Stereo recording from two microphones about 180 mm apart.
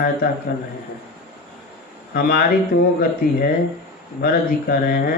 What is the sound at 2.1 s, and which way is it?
Mantra, 55° left (ahead or behind).